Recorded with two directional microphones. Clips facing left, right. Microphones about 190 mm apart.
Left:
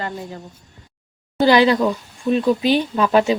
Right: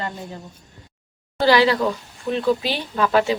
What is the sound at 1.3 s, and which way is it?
Speech, 20° left (ahead or behind).